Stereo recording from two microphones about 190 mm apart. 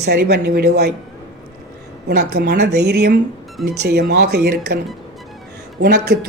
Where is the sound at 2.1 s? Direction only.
60° right (ahead or behind).